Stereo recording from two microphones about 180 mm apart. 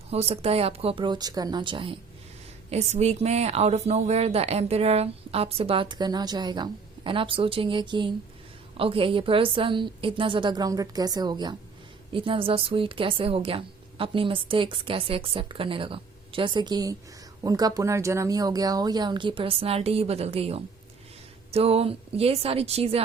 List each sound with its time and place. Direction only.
0.1 s a woman's voice: 35° right (ahead or behind)